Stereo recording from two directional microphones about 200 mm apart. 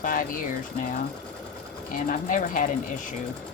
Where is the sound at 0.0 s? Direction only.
45° left (ahead or behind).